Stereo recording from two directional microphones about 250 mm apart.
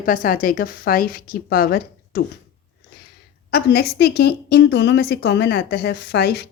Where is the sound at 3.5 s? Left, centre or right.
Left.